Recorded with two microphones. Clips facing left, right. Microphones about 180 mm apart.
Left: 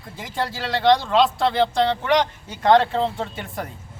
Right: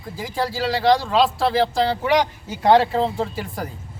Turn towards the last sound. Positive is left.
turn(degrees=0)  # may be behind; listen again after turning